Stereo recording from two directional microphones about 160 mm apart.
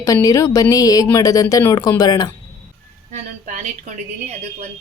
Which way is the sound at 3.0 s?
55° right (ahead or behind).